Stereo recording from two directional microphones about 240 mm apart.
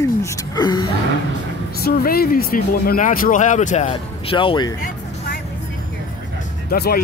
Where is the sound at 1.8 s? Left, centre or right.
Left; by 4.7 s centre.